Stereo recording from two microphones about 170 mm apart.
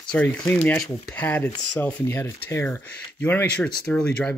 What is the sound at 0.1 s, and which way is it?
Speech, 10° left (ahead or behind).